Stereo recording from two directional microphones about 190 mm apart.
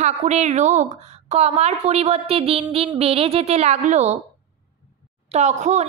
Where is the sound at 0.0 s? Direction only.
35° right (ahead or behind).